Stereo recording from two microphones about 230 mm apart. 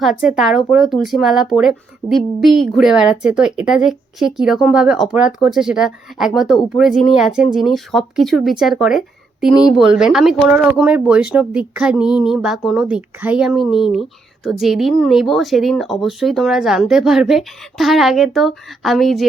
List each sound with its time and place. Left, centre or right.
0.0 s speech: centre